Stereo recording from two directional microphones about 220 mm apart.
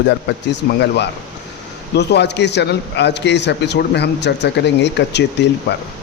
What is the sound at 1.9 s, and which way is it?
Speech, 50° left (ahead or behind).